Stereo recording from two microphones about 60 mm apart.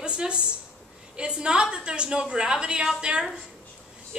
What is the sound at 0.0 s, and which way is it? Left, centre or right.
A woman's voice, centre.